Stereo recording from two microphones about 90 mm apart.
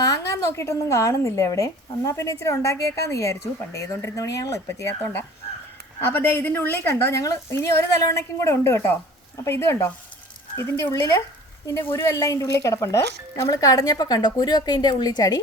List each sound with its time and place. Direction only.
0.0 s a woman's voice: 40° left (ahead or behind)
6.0 s a woman's voice: 20° left (ahead or behind)
11.6 s a woman's voice: 35° left (ahead or behind)